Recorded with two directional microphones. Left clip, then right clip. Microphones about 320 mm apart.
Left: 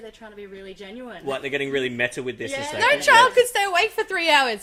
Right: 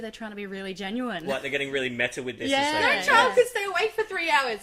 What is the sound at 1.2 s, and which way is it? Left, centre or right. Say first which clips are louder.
Speech: left 5 dB; left.